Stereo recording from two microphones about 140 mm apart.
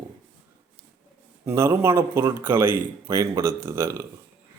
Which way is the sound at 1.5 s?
20° right (ahead or behind).